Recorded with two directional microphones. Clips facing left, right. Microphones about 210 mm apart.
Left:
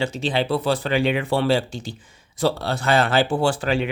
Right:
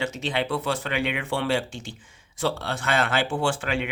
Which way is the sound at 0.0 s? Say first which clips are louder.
Left 4 dB; 30° left (ahead or behind).